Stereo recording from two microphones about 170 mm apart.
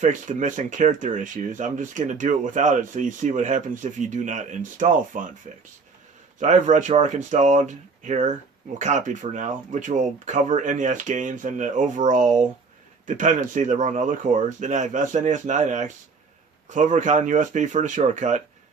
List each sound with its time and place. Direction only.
0.0 s speech: 50° right (ahead or behind)
6.4 s speech: 45° right (ahead or behind)